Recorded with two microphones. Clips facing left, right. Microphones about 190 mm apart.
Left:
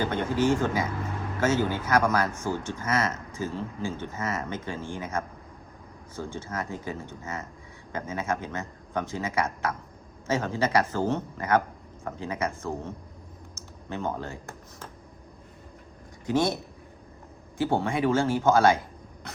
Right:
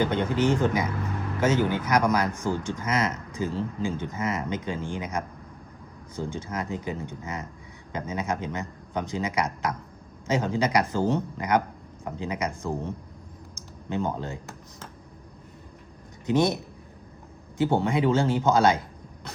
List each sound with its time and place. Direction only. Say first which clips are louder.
0.0 s speech: right 1 dB; 20° right (ahead or behind)
13.6 s computer keyboard: right 4 dB; 15° right (ahead or behind)
16.2 s speech: right 2 dB; 20° right (ahead or behind)
17.6 s speech: right 2 dB; 20° right (ahead or behind)